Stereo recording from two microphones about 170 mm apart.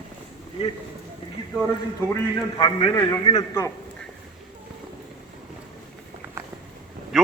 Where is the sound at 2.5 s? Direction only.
30° left (ahead or behind).